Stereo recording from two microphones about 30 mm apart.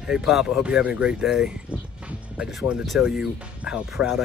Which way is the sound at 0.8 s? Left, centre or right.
Right.